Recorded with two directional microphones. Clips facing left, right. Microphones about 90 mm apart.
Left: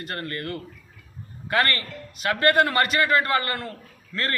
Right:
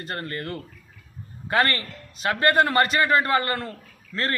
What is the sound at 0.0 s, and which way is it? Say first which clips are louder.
A man's voice: even; 25° right (ahead or behind).